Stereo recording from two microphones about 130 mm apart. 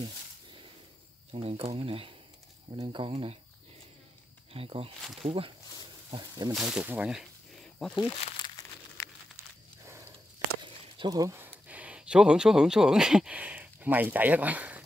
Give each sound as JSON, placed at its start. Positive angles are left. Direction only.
{"t": 0.0, "sound": "a sound", "side_deg": -40}
{"t": 1.3, "sound": "speech", "side_deg": -50}
{"t": 4.5, "sound": "speech", "side_deg": -50}
{"t": 6.5, "sound": "speech", "side_deg": -5}
{"t": 8.6, "sound": "crumpling", "side_deg": 30}
{"t": 9.8, "sound": "walk", "side_deg": -20}
{"t": 11.0, "sound": "speech", "side_deg": -30}
{"t": 11.3, "sound": "speech", "side_deg": -15}